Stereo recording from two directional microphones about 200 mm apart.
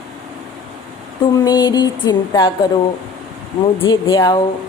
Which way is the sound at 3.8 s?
20° left (ahead or behind).